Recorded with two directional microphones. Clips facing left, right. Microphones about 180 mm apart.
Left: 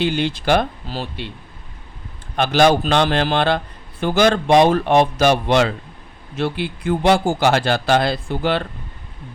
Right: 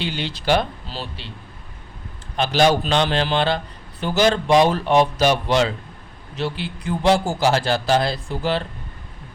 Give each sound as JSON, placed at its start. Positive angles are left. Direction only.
{"t": 0.0, "sound": "speech", "side_deg": 50}
{"t": 2.4, "sound": "a man's voice", "side_deg": 55}